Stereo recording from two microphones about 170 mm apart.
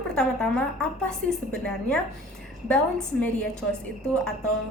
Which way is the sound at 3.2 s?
5° left (ahead or behind).